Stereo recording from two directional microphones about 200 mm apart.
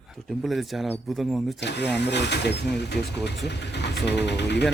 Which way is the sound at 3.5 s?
60° left (ahead or behind).